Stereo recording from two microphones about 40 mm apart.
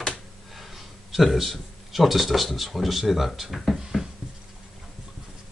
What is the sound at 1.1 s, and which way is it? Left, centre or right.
Speech, centre.